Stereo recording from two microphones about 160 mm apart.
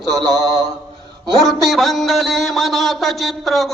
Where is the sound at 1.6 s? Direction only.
Centre (ahead or behind).